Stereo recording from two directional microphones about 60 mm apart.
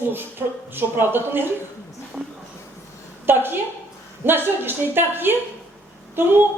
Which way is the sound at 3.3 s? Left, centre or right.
Right.